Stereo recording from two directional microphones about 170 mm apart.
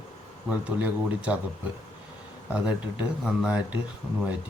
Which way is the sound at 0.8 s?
10° right (ahead or behind).